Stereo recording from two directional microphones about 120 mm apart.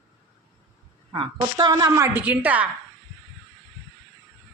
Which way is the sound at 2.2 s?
15° right (ahead or behind).